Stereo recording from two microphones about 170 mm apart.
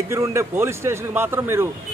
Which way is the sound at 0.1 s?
15° right (ahead or behind).